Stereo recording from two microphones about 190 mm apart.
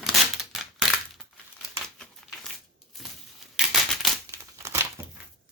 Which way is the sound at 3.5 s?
Centre (ahead or behind).